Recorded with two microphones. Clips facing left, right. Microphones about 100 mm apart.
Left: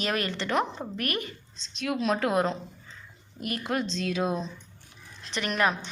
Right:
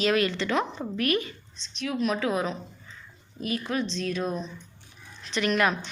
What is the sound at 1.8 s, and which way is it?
Speech, 65° left (ahead or behind).